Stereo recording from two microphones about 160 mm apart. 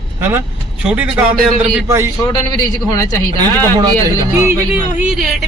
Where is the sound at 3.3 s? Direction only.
25° right (ahead or behind).